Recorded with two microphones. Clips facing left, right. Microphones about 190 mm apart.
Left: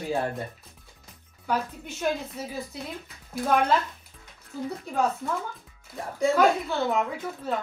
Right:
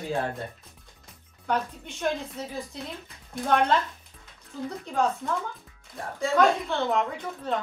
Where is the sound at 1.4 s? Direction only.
5° left (ahead or behind).